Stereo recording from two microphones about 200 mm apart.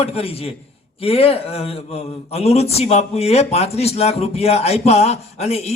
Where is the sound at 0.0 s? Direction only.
30° left (ahead or behind).